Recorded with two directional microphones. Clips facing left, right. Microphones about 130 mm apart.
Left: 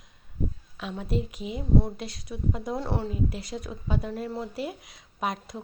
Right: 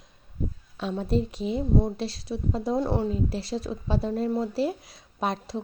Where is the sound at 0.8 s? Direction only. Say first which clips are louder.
Right 5 dB; 35° right (ahead or behind).